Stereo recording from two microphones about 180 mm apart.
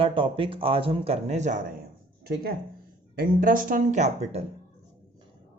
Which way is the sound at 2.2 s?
55° right (ahead or behind).